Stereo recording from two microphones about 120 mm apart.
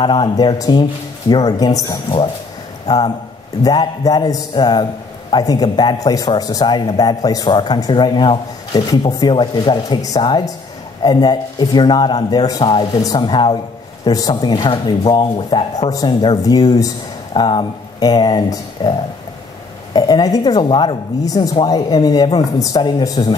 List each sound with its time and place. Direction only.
0.0 s a man's voice: 40° left (ahead or behind)